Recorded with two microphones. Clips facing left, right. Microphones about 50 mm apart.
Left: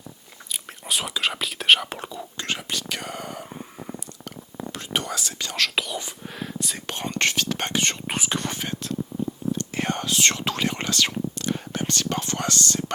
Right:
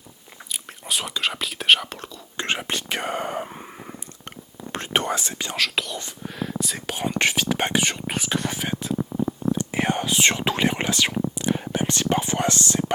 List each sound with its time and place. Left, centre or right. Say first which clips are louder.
0.9 s speech: even; centre
1.9 s speech: left 4 dB; centre
2.4 s speech: right 4 dB; right
4.7 s speech: right 5 dB; right
5.5 s speech: left 1 dB; centre
7.9 s speech: right 1 dB; centre; by 12.8 s right